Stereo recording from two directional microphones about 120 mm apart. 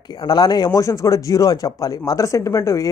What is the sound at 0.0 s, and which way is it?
Speech, 35° left (ahead or behind).